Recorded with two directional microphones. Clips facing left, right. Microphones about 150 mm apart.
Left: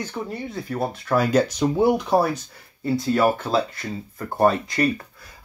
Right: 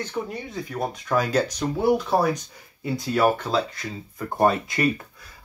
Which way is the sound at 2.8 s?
Centre (ahead or behind).